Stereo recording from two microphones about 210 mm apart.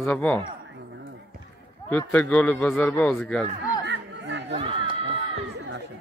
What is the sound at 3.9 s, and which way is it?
Chatter, 55° right (ahead or behind).